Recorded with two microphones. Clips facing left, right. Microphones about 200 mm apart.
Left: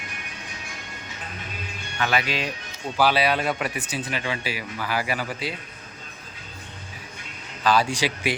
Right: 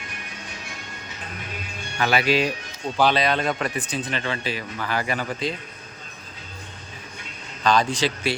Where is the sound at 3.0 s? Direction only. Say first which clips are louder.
Right 1 dB; 10° left (ahead or behind).